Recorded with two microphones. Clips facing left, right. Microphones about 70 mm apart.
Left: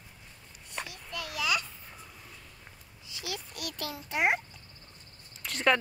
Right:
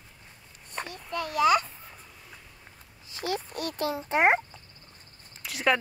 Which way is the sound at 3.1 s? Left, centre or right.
Right.